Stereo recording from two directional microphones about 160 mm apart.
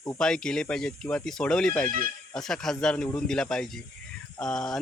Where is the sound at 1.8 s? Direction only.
60° right (ahead or behind).